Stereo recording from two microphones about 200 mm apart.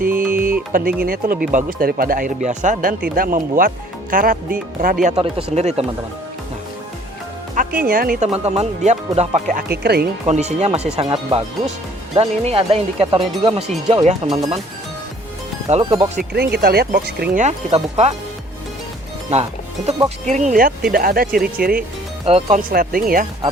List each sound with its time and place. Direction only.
0.0 s music: 45° right (ahead or behind)
0.7 s speech: 45° right (ahead or behind)
5.0 s speech: 30° right (ahead or behind)
7.8 s speech: 45° right (ahead or behind)
8.3 s speech: 30° right (ahead or behind); by 10.1 s 55° right (ahead or behind)
10.2 s speech: 35° right (ahead or behind)
10.9 s speech: 25° right (ahead or behind)
15.7 s speech: 25° right (ahead or behind)
16.1 s speech: 55° right (ahead or behind)
17.4 s speech: 30° right (ahead or behind)
19.3 s speech: 30° right (ahead or behind); by 21.8 s 50° right (ahead or behind)
22.3 s speech: 30° right (ahead or behind)
22.7 s speech: 45° right (ahead or behind)